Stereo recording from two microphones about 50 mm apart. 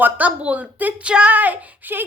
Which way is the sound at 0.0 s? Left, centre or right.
Right.